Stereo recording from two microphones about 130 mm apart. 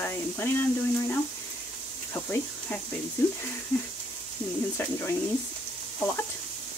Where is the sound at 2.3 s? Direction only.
15° left (ahead or behind).